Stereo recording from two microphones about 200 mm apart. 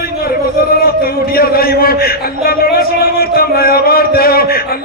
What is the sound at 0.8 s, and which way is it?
A man's voice, 50° left (ahead or behind).